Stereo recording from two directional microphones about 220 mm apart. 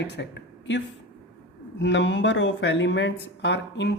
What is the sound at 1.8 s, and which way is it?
Speech, 55° left (ahead or behind).